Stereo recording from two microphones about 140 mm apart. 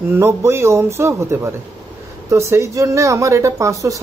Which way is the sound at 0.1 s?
20° right (ahead or behind).